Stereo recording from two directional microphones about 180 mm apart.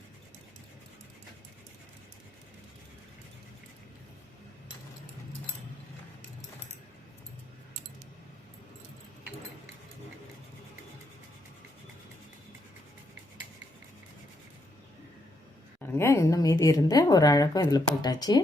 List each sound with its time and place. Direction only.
16.0 s speech: 15° left (ahead or behind)